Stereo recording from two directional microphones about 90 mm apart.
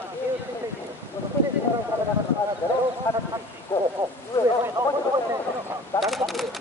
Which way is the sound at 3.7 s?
25° left (ahead or behind).